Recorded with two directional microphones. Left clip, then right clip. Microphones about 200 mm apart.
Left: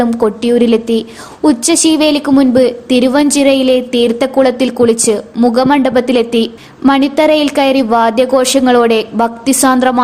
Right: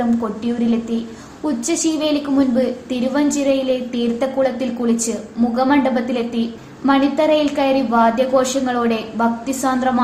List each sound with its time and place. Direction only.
0.2 s a woman's voice: 55° left (ahead or behind)